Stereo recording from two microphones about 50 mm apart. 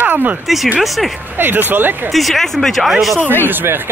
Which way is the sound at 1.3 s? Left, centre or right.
Right.